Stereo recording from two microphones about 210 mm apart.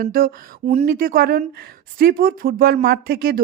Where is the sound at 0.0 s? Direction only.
45° right (ahead or behind).